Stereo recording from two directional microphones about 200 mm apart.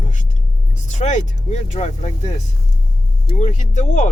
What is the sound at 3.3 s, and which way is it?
Speech, 35° left (ahead or behind).